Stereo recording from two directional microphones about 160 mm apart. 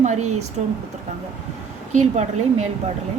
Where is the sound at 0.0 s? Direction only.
45° right (ahead or behind).